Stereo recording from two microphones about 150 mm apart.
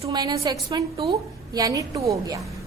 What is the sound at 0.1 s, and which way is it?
A woman's voice, 25° right (ahead or behind).